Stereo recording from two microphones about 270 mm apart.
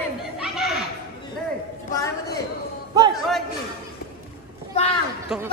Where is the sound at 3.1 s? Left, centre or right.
Centre.